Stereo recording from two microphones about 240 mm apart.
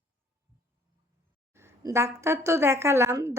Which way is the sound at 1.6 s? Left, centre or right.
Centre.